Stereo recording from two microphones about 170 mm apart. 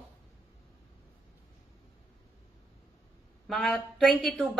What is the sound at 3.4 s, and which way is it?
A woman's voice, centre (ahead or behind).